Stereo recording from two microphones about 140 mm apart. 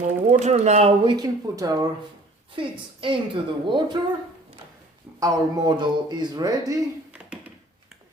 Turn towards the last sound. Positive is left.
turn(degrees=-25)  # may be behind; listen again after turning